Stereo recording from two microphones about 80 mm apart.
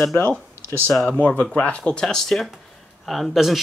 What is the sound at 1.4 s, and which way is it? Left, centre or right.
Speech, centre.